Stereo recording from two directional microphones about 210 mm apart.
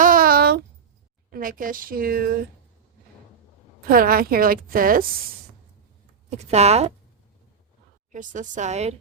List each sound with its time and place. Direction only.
0.0 s a sound: 40° right (ahead or behind)
1.3 s speech: 40° right (ahead or behind)
3.8 s a woman's voice: 45° right (ahead or behind)
6.3 s speech: 30° right (ahead or behind)
8.1 s speech: 35° right (ahead or behind)